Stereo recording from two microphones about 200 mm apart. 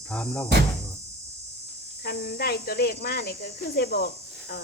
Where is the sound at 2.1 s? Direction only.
50° left (ahead or behind).